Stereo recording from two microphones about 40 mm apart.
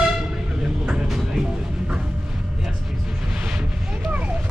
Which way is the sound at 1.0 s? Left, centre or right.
Centre.